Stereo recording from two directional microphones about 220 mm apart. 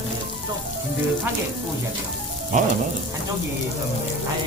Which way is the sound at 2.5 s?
35° right (ahead or behind).